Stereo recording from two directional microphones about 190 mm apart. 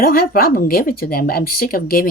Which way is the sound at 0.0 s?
50° left (ahead or behind).